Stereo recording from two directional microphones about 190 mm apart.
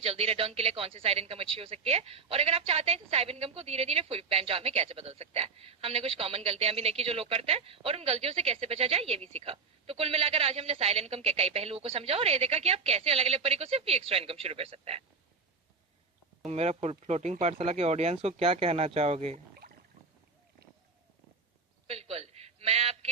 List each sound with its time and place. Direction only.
0.0 s a woman's voice: 30° right (ahead or behind)
16.5 s a woman's voice: 35° right (ahead or behind)
21.8 s a sound: 30° right (ahead or behind)